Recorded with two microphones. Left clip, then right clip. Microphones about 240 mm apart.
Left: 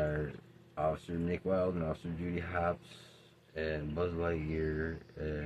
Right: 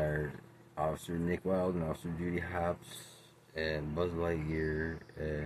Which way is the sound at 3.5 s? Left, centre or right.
Left.